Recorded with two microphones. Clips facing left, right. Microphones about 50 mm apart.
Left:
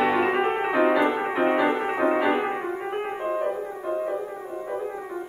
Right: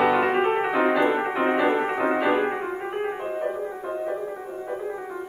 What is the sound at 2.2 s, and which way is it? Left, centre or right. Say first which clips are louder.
Music: right 1 dB; centre.